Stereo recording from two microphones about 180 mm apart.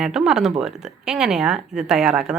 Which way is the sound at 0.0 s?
5° right (ahead or behind).